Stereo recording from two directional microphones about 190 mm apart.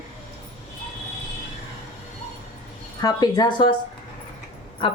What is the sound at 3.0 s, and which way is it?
Speech, 20° left (ahead or behind).